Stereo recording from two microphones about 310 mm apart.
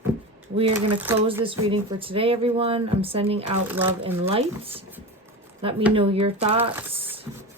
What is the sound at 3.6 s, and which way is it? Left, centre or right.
Speech, centre.